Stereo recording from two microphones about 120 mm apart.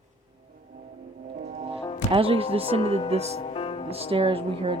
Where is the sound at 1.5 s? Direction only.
50° right (ahead or behind).